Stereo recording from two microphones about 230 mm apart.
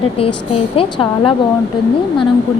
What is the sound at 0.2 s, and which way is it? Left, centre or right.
A woman's voice, left.